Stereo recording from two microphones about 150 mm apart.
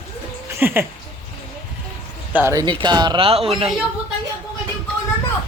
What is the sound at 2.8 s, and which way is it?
Speech, 30° right (ahead or behind).